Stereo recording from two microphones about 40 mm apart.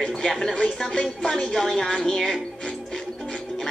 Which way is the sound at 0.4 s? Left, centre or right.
Centre.